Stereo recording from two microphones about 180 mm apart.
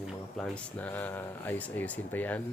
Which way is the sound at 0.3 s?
5° left (ahead or behind).